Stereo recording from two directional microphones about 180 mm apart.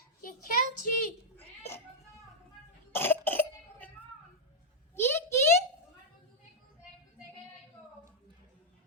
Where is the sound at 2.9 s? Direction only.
10° left (ahead or behind).